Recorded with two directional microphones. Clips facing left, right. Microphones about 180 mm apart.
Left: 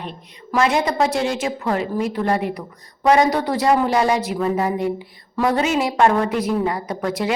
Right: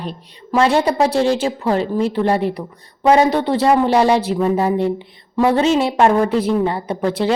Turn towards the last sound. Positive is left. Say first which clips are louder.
# right 4 dB
turn(degrees=-30)  # may be behind; listen again after turning